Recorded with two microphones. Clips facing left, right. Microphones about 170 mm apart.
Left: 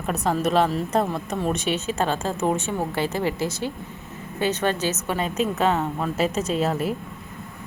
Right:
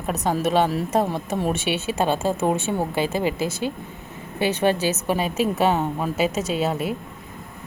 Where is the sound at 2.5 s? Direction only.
25° right (ahead or behind).